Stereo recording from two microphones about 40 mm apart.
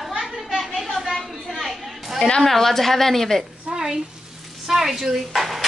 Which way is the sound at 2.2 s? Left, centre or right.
Centre.